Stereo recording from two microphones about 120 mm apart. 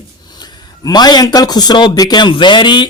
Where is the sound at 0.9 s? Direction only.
35° left (ahead or behind).